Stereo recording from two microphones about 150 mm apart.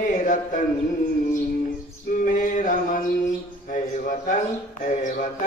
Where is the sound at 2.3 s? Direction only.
60° left (ahead or behind).